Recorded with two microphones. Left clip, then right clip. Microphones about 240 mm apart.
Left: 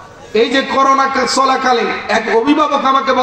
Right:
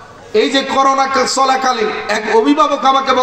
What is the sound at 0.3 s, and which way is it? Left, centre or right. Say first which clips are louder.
A man's voice: even; right.